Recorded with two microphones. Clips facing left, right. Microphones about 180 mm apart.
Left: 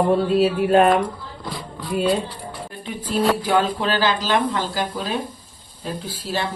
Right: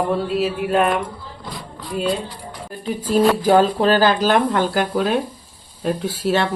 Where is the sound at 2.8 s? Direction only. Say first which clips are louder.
Right 5 dB; 45° right (ahead or behind).